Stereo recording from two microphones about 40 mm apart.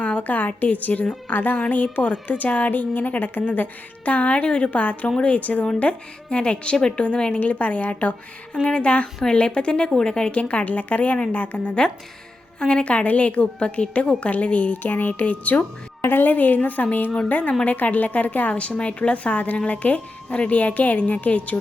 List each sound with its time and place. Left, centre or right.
0.0 s a woman's voice: left
1.7 s speech: left
6.3 s a woman's voice: left
8.6 s a woman's voice: left
10.5 s a woman's voice: left
14.8 s speech: left
16.0 s a woman's voice: left
16.3 s speech: left
18.6 s speech: left